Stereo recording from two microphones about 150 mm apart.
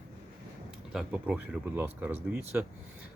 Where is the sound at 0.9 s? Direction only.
5° right (ahead or behind).